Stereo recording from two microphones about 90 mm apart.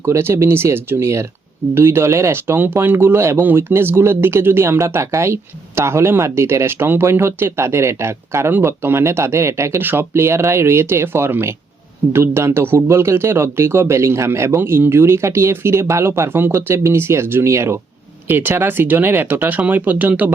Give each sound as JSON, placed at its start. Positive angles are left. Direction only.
{"t": 0.0, "sound": "speech", "side_deg": -30}